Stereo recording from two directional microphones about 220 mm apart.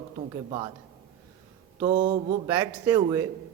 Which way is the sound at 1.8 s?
25° right (ahead or behind).